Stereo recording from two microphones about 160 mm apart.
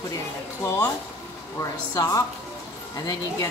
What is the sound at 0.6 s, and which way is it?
Speech, 10° left (ahead or behind).